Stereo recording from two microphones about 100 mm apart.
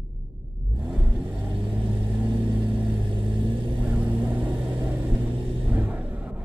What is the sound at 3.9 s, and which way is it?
Vehicle, 15° right (ahead or behind).